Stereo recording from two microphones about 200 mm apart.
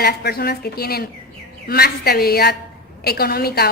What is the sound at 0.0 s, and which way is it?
A woman's voice, 50° left (ahead or behind).